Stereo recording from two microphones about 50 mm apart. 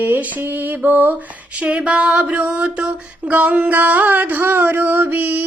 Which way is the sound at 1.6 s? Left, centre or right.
Right.